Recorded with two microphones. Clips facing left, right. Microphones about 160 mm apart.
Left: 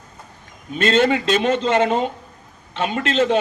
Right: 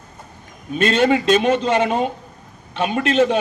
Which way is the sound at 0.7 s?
15° right (ahead or behind).